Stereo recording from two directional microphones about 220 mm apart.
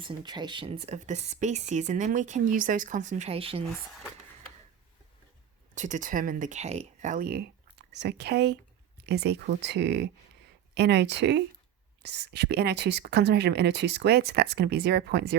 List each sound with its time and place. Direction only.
0.0 s speech: 20° right (ahead or behind)
5.7 s speech: 35° right (ahead or behind); by 15.4 s 50° right (ahead or behind)